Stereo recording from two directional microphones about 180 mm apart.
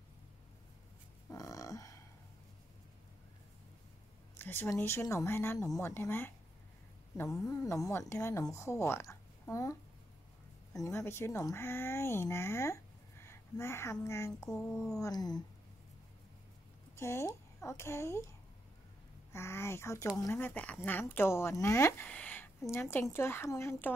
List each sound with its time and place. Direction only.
1.3 s grunt: 20° left (ahead or behind)
4.4 s speech: 10° left (ahead or behind)
7.4 s speech: 15° left (ahead or behind)
15.0 s cat: 20° left (ahead or behind)
16.9 s a child's voice: 15° left (ahead or behind)
19.3 s speech: 15° left (ahead or behind)